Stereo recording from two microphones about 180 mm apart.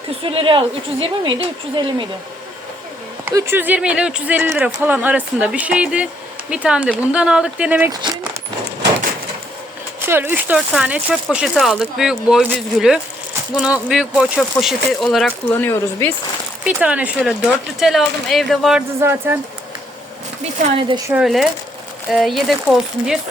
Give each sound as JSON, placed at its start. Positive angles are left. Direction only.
{"t": 0.2, "sound": "a woman's voice", "side_deg": -30}
{"t": 3.2, "sound": "speech", "side_deg": -15}
{"t": 7.9, "sound": "speech", "side_deg": -20}
{"t": 10.1, "sound": "speech", "side_deg": -10}
{"t": 16.6, "sound": "speech", "side_deg": -5}
{"t": 18.9, "sound": "speech", "side_deg": -15}
{"t": 21.1, "sound": "speech", "side_deg": -5}